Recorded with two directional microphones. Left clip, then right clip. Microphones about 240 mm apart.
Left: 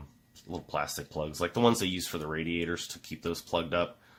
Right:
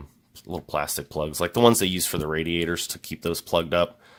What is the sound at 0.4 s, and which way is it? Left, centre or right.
Speech, right.